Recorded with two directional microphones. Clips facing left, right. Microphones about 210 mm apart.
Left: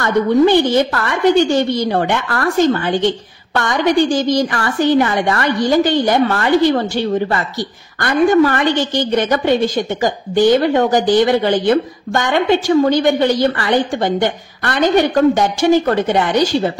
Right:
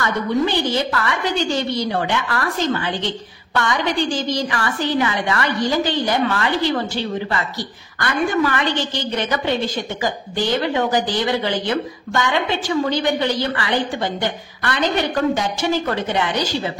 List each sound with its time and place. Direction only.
0.0 s a woman's voice: 55° left (ahead or behind)